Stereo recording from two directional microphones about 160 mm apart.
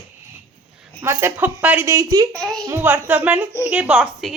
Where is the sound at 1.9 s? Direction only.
25° right (ahead or behind).